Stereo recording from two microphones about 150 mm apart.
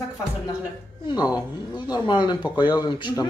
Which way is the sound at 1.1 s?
25° left (ahead or behind).